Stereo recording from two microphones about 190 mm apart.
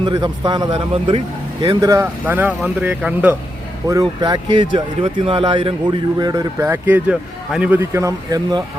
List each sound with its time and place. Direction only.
0.0 s speech: 25° right (ahead or behind); by 3.3 s 5° right (ahead or behind)
3.8 s speech: 20° right (ahead or behind)